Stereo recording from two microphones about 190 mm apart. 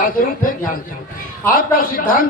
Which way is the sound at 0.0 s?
45° left (ahead or behind).